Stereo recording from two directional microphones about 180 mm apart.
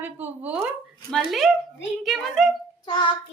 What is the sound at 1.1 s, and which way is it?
A woman's voice, centre (ahead or behind).